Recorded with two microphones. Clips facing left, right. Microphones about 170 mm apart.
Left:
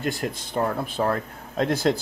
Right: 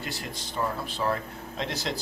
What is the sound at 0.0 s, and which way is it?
Speech, 50° left (ahead or behind).